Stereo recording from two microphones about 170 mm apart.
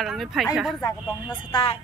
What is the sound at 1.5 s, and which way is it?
Speech, 30° left (ahead or behind).